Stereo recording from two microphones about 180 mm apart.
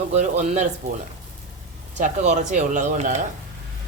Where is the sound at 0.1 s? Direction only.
40° right (ahead or behind).